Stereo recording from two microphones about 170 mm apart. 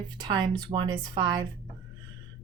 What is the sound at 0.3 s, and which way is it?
Speech, 25° right (ahead or behind).